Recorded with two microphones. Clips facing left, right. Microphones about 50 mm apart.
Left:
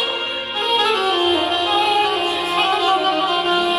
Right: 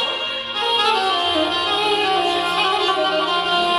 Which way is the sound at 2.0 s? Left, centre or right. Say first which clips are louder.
Even; centre.